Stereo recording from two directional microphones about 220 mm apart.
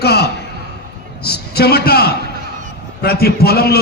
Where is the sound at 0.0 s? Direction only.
45° left (ahead or behind).